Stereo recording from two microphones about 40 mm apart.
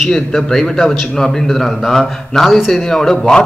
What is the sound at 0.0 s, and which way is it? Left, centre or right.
A man's voice, centre.